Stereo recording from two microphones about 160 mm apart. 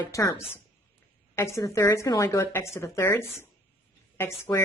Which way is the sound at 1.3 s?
15° left (ahead or behind).